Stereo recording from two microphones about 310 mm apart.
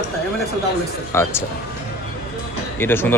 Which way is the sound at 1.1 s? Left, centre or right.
Centre.